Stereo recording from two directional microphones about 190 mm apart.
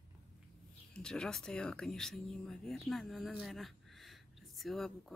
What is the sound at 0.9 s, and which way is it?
Speech, 5° left (ahead or behind).